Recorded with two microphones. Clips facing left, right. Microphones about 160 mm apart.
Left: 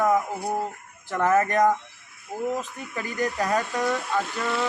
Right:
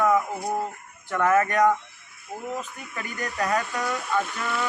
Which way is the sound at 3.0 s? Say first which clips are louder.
Left 3 dB; 30° left (ahead or behind).